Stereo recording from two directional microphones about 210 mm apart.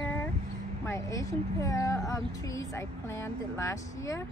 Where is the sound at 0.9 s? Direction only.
15° left (ahead or behind).